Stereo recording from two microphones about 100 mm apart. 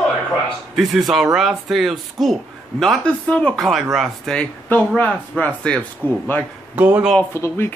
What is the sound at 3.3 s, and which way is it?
Speech, 15° left (ahead or behind).